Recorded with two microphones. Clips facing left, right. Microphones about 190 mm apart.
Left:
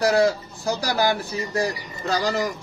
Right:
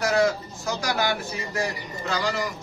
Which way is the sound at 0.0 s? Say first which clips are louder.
Left 3 dB; 35° left (ahead or behind).